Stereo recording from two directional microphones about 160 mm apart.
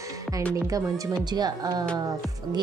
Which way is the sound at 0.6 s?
20° right (ahead or behind).